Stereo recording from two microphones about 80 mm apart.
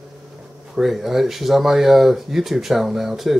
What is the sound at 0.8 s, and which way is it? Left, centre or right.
Speech, centre.